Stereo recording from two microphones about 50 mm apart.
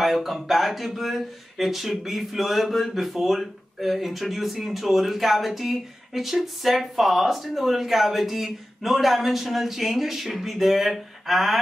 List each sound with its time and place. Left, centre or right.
0.0 s speech: centre